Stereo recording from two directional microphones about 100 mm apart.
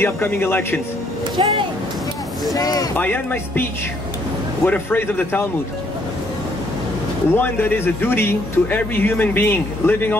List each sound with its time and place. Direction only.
0.0 s speech: 20° left (ahead or behind)
1.3 s speech: 55° right (ahead or behind)
2.5 s speech: 40° left (ahead or behind)
3.0 s speech: 20° left (ahead or behind)
4.6 s speech: 20° left (ahead or behind)
7.3 s speech: 20° left (ahead or behind)